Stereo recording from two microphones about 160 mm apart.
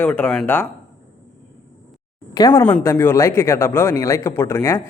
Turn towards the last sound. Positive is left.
turn(degrees=15)  # may be behind; listen again after turning